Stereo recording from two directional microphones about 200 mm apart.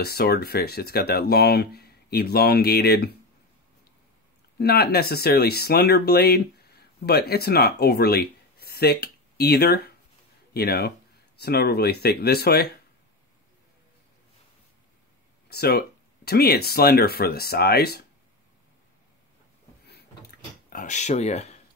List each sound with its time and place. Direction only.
0.0 s speech: 50° left (ahead or behind)
4.6 s speech: 50° left (ahead or behind)
15.5 s speech: 50° left (ahead or behind)
19.9 s a sound: 55° left (ahead or behind)
20.7 s speech: 35° left (ahead or behind)